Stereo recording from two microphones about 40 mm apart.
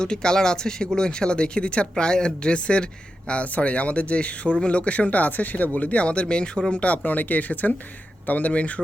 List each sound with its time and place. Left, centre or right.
0.0 s speech: centre; by 8.8 s left